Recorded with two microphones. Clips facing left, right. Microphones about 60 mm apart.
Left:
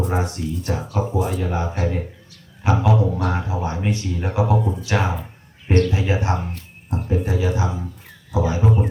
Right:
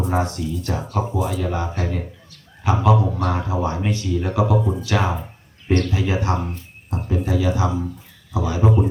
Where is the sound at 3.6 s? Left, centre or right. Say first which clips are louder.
Right 1 dB; left.